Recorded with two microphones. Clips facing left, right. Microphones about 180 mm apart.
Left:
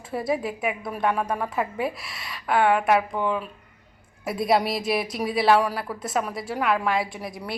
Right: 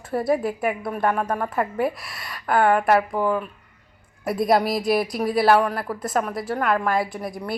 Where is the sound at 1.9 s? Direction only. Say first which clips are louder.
Right 1 dB; 25° left (ahead or behind).